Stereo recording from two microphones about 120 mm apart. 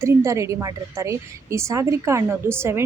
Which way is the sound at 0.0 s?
25° right (ahead or behind).